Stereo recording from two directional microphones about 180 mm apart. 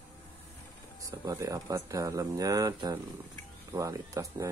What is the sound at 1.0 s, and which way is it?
Speech, 20° right (ahead or behind).